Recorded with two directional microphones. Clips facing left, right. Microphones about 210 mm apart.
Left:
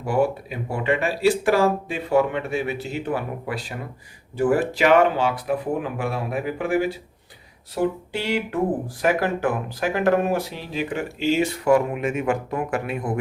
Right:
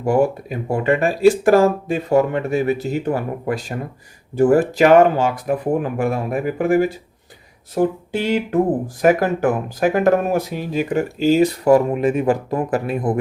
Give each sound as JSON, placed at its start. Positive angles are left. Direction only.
{"t": 0.0, "sound": "speech", "side_deg": -45}